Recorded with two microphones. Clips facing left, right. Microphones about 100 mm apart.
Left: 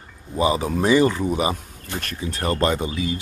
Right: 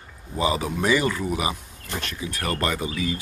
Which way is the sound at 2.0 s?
45° left (ahead or behind).